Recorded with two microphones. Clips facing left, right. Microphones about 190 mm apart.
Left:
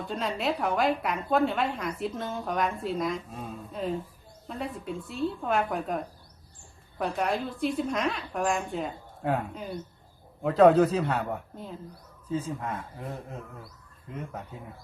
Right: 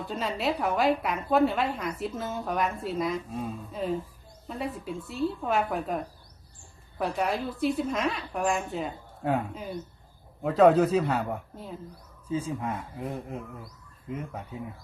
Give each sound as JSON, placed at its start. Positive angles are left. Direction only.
{"t": 0.1, "sound": "a woman's voice", "side_deg": 0}
{"t": 7.0, "sound": "a woman's voice", "side_deg": 0}